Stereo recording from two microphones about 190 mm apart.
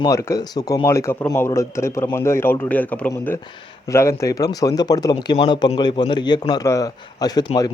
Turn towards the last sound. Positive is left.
turn(degrees=20)  # may be behind; listen again after turning